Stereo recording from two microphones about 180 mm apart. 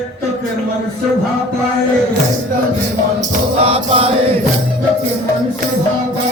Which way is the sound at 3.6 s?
35° right (ahead or behind).